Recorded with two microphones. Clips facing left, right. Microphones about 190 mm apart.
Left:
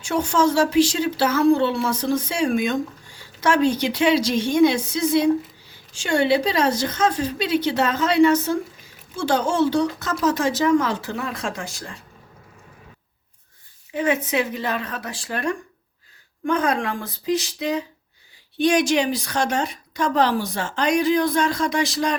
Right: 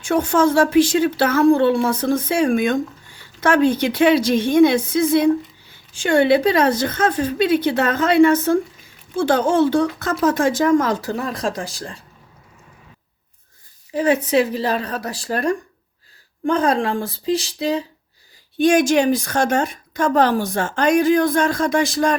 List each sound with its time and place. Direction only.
0.0 s a woman's voice: 55° right (ahead or behind); by 11.9 s 35° right (ahead or behind)
13.9 s speech: 35° right (ahead or behind)
18.5 s a woman's voice: 50° right (ahead or behind)